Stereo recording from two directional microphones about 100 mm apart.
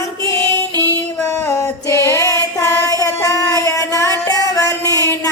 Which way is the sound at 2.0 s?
30° left (ahead or behind).